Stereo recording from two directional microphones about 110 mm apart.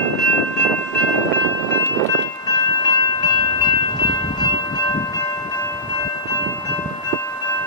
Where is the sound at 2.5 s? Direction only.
40° left (ahead or behind).